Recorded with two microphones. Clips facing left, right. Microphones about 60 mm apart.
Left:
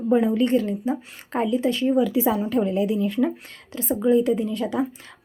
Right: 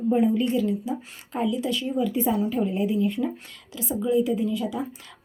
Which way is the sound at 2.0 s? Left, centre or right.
Left.